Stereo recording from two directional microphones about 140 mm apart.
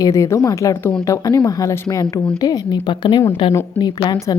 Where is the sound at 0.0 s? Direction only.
20° left (ahead or behind).